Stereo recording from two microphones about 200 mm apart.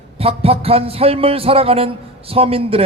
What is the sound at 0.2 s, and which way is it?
A man's voice, 30° right (ahead or behind).